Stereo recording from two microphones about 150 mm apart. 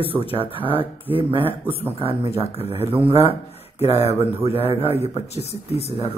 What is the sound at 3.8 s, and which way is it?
Speech, 45° left (ahead or behind).